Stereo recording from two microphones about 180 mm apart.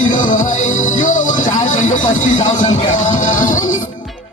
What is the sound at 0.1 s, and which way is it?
Music, 45° left (ahead or behind).